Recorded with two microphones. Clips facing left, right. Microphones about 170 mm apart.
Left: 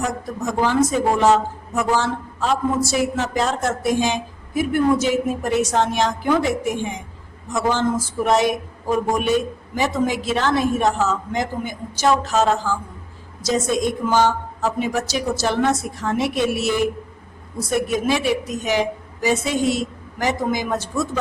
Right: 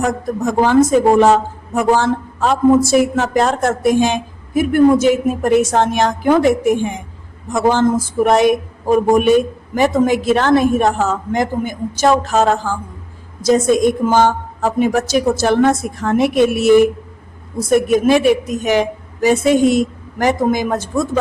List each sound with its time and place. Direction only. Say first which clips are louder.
0.0 s speech: right 7 dB; 55° right (ahead or behind)